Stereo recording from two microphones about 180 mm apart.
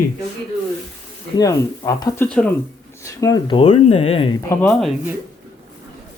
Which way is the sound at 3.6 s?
35° left (ahead or behind).